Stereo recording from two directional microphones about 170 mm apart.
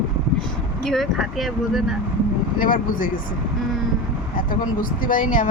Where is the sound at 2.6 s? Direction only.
55° left (ahead or behind).